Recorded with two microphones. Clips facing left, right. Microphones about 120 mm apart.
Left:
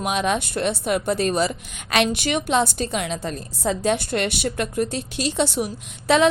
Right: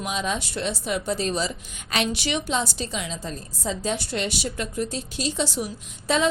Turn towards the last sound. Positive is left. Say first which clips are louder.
# left 5 dB
turn(degrees=70)  # may be behind; listen again after turning